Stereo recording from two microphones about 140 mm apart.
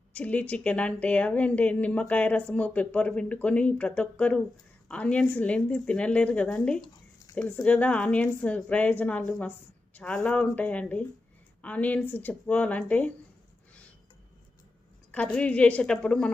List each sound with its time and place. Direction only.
0.1 s speech: 10° left (ahead or behind)
15.1 s speech: 10° left (ahead or behind)